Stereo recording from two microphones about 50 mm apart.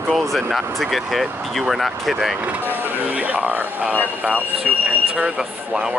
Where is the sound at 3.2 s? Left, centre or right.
Right.